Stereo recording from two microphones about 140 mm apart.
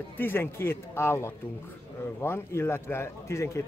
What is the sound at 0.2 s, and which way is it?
A man's voice, 15° left (ahead or behind).